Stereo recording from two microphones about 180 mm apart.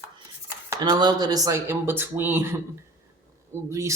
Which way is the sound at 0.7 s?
25° right (ahead or behind).